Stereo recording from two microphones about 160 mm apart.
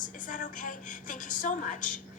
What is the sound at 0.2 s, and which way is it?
A woman's voice, 55° left (ahead or behind).